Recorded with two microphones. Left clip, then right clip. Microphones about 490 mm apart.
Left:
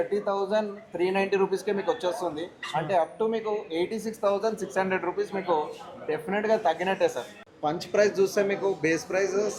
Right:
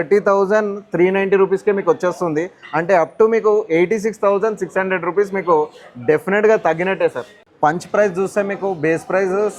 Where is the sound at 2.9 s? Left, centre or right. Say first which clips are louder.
Right 13 dB; right.